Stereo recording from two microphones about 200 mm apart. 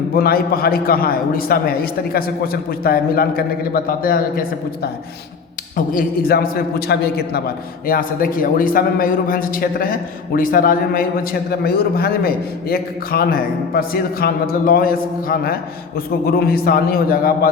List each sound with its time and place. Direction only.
0.1 s a man's voice: 50° left (ahead or behind)
5.7 s a man's voice: 45° left (ahead or behind)